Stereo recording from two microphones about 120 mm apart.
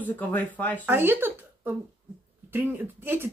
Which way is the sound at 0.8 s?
20° right (ahead or behind).